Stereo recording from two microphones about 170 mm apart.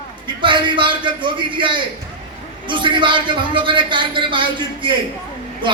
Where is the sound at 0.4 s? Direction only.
30° right (ahead or behind).